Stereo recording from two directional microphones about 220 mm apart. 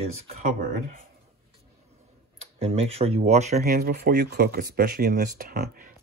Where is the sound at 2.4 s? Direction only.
25° right (ahead or behind).